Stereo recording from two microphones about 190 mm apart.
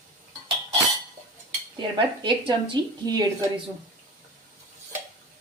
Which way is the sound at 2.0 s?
25° right (ahead or behind).